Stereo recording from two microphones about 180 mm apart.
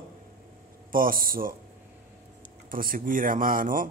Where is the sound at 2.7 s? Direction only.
50° right (ahead or behind).